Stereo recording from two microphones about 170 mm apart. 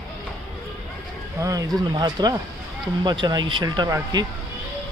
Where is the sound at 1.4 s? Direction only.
20° right (ahead or behind).